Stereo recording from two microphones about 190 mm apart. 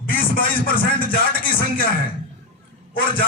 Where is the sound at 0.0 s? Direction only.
50° left (ahead or behind).